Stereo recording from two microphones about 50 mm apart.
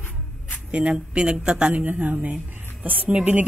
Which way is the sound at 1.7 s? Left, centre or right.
Right.